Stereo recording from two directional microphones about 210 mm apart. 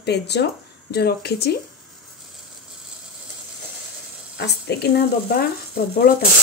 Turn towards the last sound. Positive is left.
turn(degrees=45)  # may be behind; listen again after turning